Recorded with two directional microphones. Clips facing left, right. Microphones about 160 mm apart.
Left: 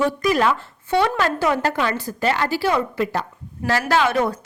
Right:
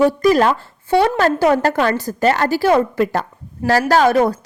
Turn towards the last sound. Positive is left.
turn(degrees=-40)  # may be behind; listen again after turning